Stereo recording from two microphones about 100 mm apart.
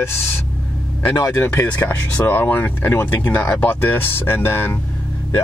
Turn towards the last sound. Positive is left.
turn(degrees=25)  # may be behind; listen again after turning